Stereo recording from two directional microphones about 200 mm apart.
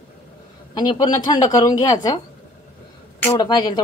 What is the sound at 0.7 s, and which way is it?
A woman's voice, 20° left (ahead or behind).